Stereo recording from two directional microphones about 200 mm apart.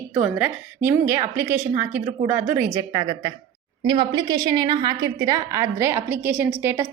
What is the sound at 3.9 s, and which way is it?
Speech, 20° right (ahead or behind).